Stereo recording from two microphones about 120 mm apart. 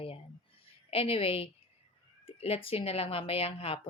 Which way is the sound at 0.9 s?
50° left (ahead or behind).